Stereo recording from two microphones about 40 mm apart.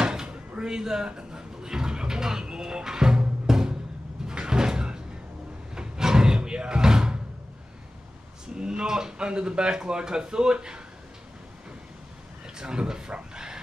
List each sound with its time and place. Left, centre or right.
0.0 s door: right
4.3 s sliding door: centre
5.8 s slam: centre
8.5 s speech: centre
12.5 s speech: centre